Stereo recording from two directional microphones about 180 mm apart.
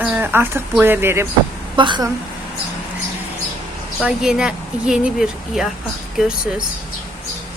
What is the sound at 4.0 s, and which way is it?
Speech, 5° right (ahead or behind).